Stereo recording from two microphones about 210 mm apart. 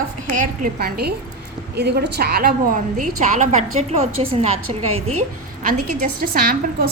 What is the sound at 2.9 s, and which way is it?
A woman's voice, 35° right (ahead or behind).